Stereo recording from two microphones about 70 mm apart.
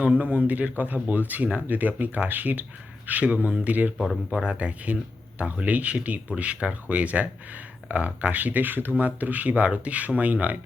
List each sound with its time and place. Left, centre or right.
0.0 s speech: right
3.9 s speech: centre
4.4 s speech: centre